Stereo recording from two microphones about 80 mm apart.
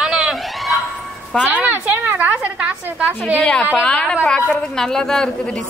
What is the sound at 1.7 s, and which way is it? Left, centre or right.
A woman's voice, right.